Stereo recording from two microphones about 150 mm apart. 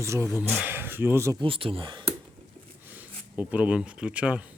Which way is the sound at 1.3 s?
35° right (ahead or behind).